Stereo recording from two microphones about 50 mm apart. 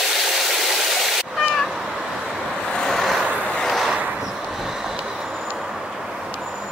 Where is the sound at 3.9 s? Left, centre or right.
Right.